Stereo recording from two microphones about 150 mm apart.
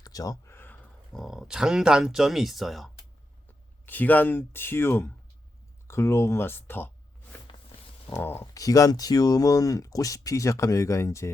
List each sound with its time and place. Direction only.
0.0 s a sound: 25° left (ahead or behind)
1.1 s speech: centre (ahead or behind)
3.8 s speech: 10° left (ahead or behind)
8.1 s speech: 15° left (ahead or behind)